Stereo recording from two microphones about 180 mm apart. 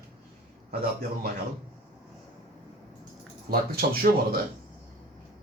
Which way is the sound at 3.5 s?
55° right (ahead or behind).